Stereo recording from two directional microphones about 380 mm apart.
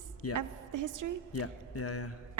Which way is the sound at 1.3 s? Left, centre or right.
Left.